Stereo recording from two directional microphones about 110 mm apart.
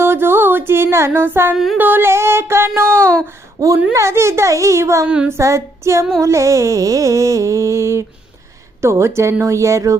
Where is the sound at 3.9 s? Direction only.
25° right (ahead or behind).